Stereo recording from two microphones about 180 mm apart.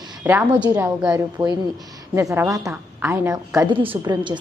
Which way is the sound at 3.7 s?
30° right (ahead or behind).